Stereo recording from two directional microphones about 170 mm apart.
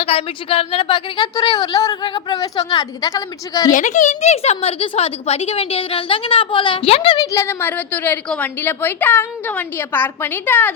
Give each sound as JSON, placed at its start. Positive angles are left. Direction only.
{"t": 0.0, "sound": "a woman's voice", "side_deg": 35}
{"t": 3.7, "sound": "a woman's voice", "side_deg": 50}
{"t": 7.3, "sound": "a woman's voice", "side_deg": 15}